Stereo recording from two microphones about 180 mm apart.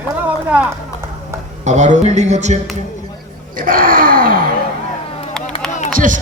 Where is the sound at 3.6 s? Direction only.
50° right (ahead or behind).